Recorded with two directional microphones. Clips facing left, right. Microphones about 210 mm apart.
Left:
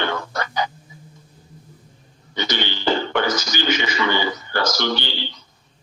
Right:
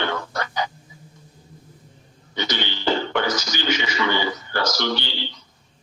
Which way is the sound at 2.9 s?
55° left (ahead or behind).